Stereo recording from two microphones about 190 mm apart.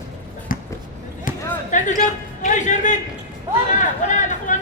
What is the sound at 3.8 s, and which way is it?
Chatter, 40° left (ahead or behind).